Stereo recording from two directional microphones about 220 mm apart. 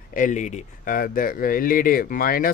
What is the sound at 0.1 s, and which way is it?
Speech, 35° left (ahead or behind).